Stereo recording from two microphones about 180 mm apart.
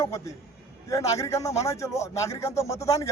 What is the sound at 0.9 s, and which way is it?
Speech, 20° left (ahead or behind).